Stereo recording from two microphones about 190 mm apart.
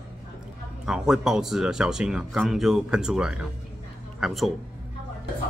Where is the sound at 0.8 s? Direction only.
5° right (ahead or behind).